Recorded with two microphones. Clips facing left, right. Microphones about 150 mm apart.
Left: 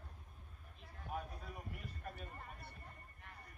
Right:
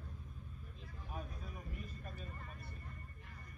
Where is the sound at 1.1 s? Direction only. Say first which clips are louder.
Left 3 dB; 65° left (ahead or behind).